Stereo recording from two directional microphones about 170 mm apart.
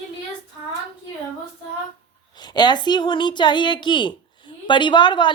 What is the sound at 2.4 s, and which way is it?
A woman's voice, 25° left (ahead or behind).